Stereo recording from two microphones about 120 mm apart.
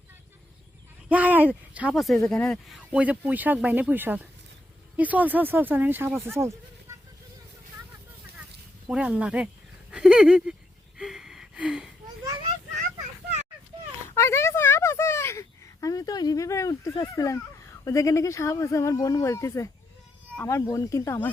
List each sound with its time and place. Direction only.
1.0 s speech: 10° right (ahead or behind)
1.9 s speech: centre (ahead or behind)
2.7 s speech: 10° right (ahead or behind)
8.9 s speech: 5° right (ahead or behind)
10.9 s a sound: 5° right (ahead or behind)
14.1 s speech: 20° left (ahead or behind)